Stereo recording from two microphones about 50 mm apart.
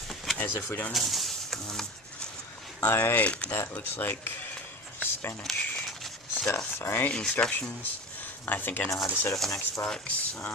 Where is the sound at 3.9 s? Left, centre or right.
Left.